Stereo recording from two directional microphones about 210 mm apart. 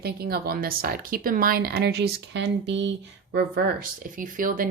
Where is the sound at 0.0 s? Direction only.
45° right (ahead or behind).